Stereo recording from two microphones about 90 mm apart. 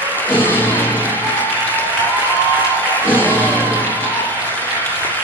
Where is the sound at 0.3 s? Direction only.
20° left (ahead or behind).